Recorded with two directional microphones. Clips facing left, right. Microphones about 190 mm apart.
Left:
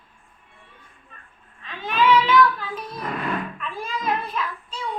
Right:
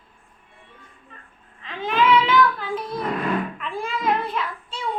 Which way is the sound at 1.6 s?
20° right (ahead or behind).